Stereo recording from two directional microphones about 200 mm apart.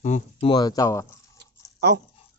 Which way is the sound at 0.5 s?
20° left (ahead or behind).